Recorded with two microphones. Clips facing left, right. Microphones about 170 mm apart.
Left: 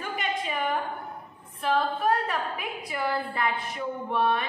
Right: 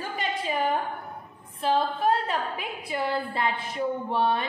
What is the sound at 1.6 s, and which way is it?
Female singing, 30° right (ahead or behind).